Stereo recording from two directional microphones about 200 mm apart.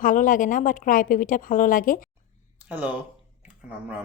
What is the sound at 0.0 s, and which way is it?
A woman's voice, 40° left (ahead or behind).